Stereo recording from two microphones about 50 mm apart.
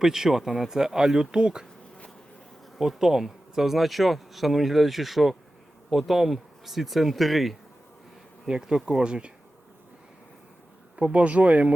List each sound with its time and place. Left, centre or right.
0.0 s speech: centre
2.7 s speech: centre
8.4 s speech: centre
10.9 s speech: right